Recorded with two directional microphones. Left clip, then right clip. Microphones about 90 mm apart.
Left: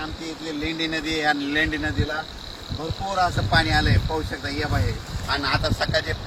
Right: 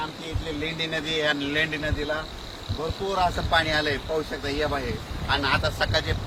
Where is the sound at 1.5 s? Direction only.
90° right.